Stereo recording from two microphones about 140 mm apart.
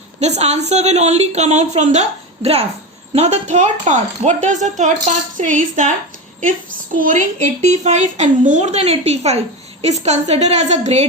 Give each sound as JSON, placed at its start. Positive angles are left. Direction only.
{"t": 0.2, "sound": "a woman's voice", "side_deg": -50}
{"t": 6.9, "sound": "a woman's voice", "side_deg": -70}